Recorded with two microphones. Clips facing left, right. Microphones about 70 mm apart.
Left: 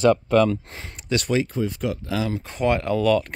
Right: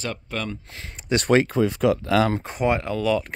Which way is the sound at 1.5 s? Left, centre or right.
Right.